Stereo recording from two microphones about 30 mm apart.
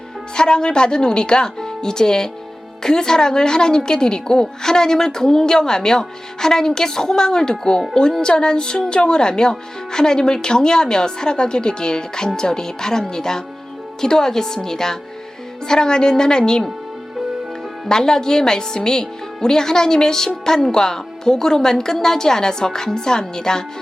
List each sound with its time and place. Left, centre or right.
0.3 s a woman's voice: left
17.8 s a woman's voice: left